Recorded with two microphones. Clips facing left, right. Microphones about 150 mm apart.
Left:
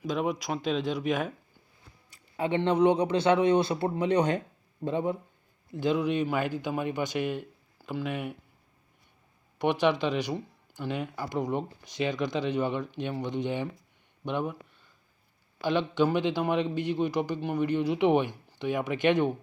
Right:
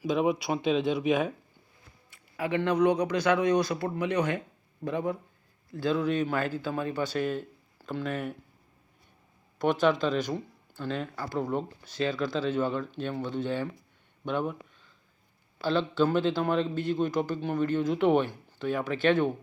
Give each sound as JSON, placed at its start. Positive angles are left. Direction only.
{"t": 0.0, "sound": "speech", "side_deg": 0}
{"t": 2.0, "sound": "speech", "side_deg": 30}
{"t": 9.6, "sound": "speech", "side_deg": 10}
{"t": 15.6, "sound": "speech", "side_deg": 15}